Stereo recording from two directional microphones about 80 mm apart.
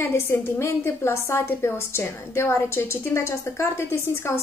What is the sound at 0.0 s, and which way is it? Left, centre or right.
A woman's voice, left.